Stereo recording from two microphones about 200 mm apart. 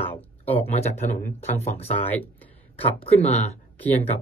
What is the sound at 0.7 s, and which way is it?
Speech, 35° left (ahead or behind).